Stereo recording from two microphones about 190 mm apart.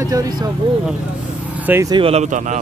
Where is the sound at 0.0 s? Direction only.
20° right (ahead or behind).